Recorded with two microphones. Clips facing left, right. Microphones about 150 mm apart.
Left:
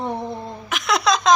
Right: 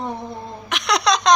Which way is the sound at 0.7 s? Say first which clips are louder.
Even; centre (ahead or behind).